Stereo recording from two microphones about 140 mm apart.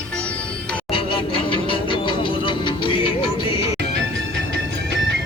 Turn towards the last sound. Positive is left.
turn(degrees=40)  # may be behind; listen again after turning